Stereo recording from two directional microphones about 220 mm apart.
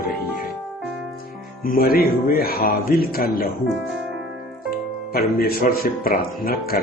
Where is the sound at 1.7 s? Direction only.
40° left (ahead or behind).